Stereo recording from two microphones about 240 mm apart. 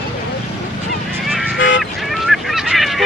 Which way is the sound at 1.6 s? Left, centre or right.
Left.